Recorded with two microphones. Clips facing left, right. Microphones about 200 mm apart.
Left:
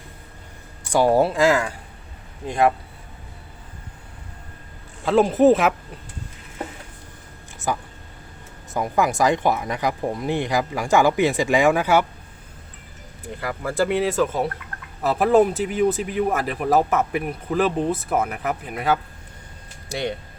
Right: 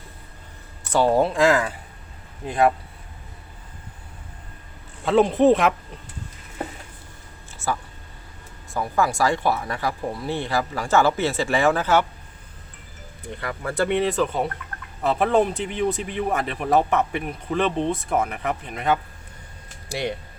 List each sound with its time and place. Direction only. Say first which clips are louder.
0.9 s speech: left 1 dB; 10° left (ahead or behind)
5.0 s speech: left 1 dB; centre (ahead or behind)
7.7 s speech: left 1 dB; 15° left (ahead or behind)
13.2 s speech: left 2 dB; centre (ahead or behind)